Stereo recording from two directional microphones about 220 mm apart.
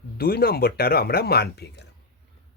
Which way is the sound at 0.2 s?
45° left (ahead or behind).